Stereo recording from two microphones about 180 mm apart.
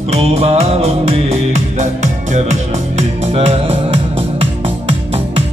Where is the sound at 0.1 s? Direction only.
35° right (ahead or behind).